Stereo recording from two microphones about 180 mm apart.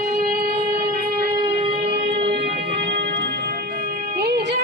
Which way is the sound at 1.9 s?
70° right (ahead or behind).